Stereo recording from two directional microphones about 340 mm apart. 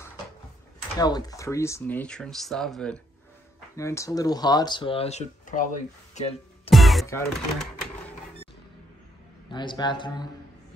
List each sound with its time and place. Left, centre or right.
0.9 s speech: centre
6.1 s music: centre
6.7 s speech: centre
9.5 s speech: centre